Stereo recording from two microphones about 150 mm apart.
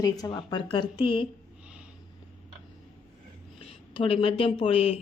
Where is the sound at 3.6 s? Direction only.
40° left (ahead or behind).